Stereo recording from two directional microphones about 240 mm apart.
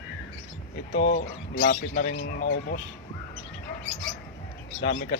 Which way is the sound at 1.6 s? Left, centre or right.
Left.